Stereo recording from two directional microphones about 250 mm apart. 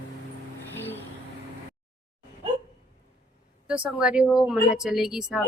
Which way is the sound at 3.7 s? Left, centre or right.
Centre.